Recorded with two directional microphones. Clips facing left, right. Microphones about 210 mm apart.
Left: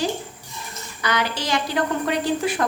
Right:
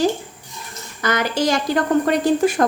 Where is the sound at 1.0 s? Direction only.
45° right (ahead or behind).